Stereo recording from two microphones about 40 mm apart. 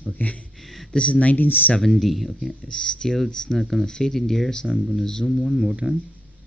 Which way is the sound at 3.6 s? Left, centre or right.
Centre.